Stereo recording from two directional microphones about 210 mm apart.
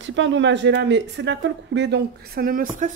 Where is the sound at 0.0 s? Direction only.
60° right (ahead or behind).